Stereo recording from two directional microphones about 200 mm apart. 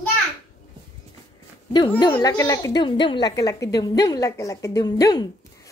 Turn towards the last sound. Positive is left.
turn(degrees=20)  # may be behind; listen again after turning